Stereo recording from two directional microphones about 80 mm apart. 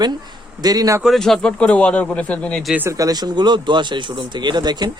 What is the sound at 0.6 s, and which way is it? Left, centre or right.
Speech, right.